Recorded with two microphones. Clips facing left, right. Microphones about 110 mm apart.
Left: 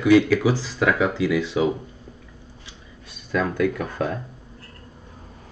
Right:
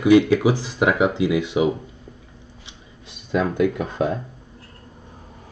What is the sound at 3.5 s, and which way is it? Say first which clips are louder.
Speech: right 2 dB; 20° right (ahead or behind).